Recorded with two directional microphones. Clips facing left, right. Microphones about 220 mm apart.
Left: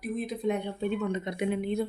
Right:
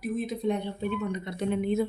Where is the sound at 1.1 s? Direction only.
20° left (ahead or behind).